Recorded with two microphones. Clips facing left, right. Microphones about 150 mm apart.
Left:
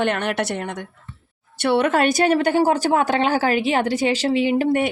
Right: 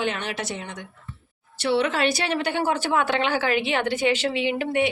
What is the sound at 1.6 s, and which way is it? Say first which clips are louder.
Speech: left 4 dB; 55° left (ahead or behind).